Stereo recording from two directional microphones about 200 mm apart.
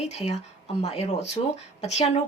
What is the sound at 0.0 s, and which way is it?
Speech, 35° left (ahead or behind).